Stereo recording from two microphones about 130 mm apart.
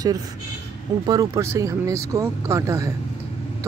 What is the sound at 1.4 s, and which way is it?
Speech, 20° right (ahead or behind).